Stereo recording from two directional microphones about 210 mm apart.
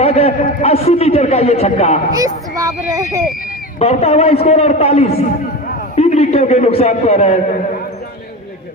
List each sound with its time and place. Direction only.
0.0 s a man's voice: 30° left (ahead or behind)
2.1 s speech: 15° right (ahead or behind)
3.8 s a man's voice: 30° left (ahead or behind)